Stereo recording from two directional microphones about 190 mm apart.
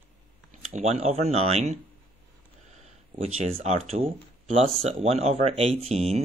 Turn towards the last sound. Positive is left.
turn(degrees=-35)  # may be behind; listen again after turning